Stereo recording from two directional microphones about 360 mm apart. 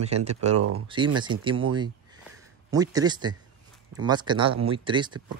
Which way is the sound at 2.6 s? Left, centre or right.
Centre.